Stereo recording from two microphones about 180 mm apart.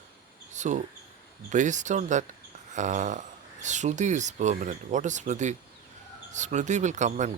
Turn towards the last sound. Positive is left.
turn(degrees=-40)  # may be behind; listen again after turning